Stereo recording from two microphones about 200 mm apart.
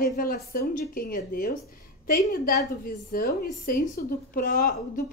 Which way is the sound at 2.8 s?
45° left (ahead or behind).